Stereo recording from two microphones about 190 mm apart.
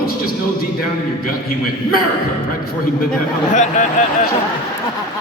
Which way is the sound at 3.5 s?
40° left (ahead or behind).